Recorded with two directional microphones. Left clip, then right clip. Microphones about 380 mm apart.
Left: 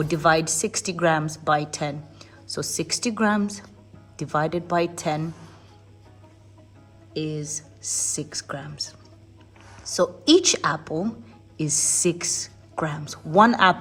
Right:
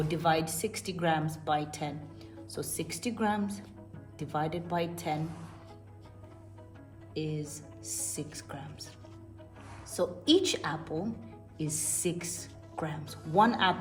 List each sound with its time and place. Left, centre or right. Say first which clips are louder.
0.1 s a woman's voice: left 10 dB; left
7.3 s a woman's voice: left 8 dB; left
9.9 s a woman's voice: left 9 dB; left